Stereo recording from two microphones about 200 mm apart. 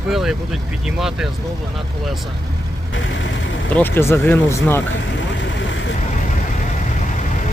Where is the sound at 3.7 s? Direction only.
10° left (ahead or behind).